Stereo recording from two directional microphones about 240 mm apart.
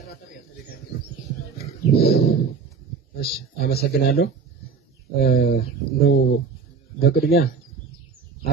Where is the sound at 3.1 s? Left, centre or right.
Left.